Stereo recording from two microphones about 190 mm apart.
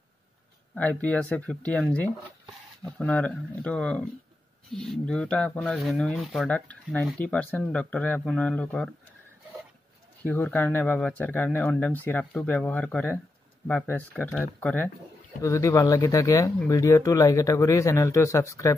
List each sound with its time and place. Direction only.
0.7 s speech: 5° left (ahead or behind)
10.2 s speech: 10° left (ahead or behind)